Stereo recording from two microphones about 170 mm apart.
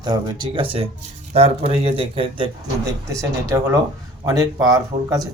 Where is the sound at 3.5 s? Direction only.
20° right (ahead or behind).